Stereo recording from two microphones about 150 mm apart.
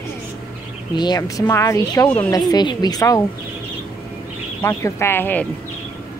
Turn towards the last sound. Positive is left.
turn(degrees=15)  # may be behind; listen again after turning